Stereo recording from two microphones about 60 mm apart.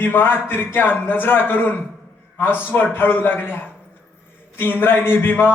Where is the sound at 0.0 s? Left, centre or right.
Left.